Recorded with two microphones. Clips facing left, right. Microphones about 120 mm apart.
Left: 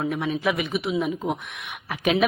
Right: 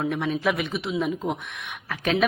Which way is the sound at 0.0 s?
5° left (ahead or behind).